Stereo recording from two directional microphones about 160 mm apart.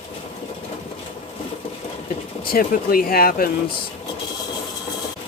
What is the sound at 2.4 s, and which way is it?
Speech, 65° left (ahead or behind).